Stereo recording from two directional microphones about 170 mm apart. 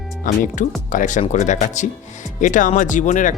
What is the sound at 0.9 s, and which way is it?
Speech, 50° left (ahead or behind).